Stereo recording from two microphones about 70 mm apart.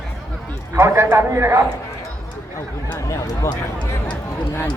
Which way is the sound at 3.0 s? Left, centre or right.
Left.